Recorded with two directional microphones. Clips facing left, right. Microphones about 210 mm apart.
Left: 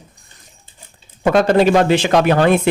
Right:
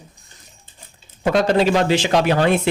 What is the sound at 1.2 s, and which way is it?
Speech, 50° left (ahead or behind).